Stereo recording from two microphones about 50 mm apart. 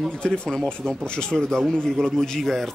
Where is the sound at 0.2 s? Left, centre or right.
Centre.